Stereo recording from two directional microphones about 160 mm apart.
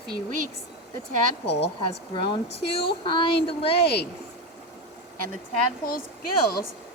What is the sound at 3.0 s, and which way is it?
Speech, 35° left (ahead or behind).